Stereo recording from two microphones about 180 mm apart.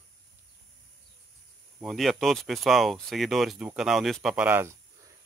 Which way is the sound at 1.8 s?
Centre (ahead or behind).